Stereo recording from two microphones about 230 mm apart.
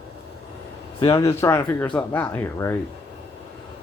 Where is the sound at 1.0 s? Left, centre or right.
Centre.